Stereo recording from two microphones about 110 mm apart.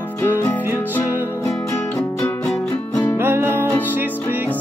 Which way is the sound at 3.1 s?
20° right (ahead or behind).